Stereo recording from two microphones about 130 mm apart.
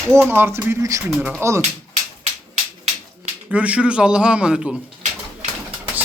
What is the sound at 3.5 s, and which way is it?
A man's voice, 10° right (ahead or behind).